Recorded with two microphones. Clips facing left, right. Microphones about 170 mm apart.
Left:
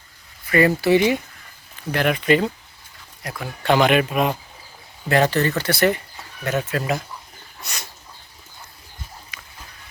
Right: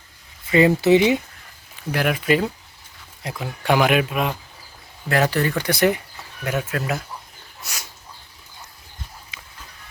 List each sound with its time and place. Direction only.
0.5 s speech: 20° right (ahead or behind)
1.9 s speech: 5° right (ahead or behind)
3.2 s speech: 20° right (ahead or behind); by 7.0 s centre (ahead or behind)
7.6 s bird: 10° right (ahead or behind)
9.3 s dog: 25° right (ahead or behind)